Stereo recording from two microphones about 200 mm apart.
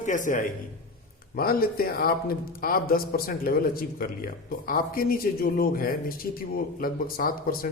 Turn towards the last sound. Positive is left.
turn(degrees=45)  # may be behind; listen again after turning